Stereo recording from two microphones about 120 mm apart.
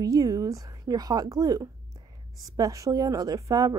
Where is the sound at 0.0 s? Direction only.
30° right (ahead or behind).